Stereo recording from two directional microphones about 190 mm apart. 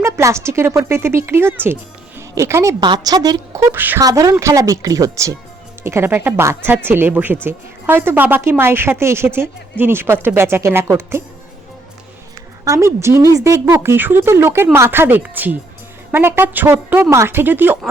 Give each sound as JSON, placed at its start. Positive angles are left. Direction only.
{"t": 0.0, "sound": "speech", "side_deg": -15}
{"t": 12.6, "sound": "speech", "side_deg": -15}